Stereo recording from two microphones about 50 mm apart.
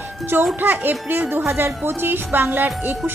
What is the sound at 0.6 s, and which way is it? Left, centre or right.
A woman's voice, right.